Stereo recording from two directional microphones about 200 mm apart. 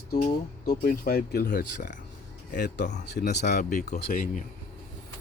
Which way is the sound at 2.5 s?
55° left (ahead or behind).